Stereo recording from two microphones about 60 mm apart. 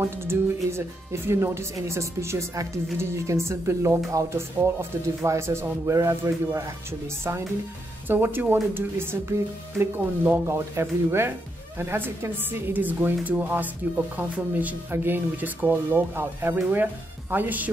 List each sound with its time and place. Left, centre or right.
0.0 s speech: right
2.5 s speech: right
3.0 s speech: right
8.1 s a woman's voice: right
10.4 s a woman's voice: right
15.9 s speech: right
16.7 s speech: right